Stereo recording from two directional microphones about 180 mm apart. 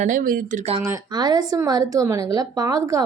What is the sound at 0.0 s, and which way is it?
Speech, 50° right (ahead or behind).